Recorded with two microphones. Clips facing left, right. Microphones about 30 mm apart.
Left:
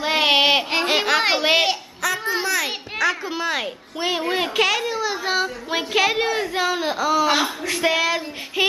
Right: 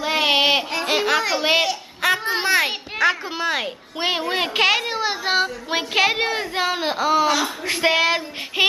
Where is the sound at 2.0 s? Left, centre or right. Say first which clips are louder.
Right 4 dB; right.